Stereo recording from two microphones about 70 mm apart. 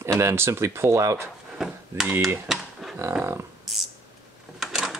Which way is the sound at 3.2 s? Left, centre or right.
Right.